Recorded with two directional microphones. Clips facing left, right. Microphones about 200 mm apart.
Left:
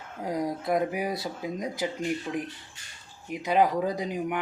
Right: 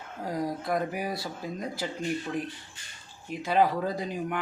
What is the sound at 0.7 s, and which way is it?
Speech, 20° left (ahead or behind).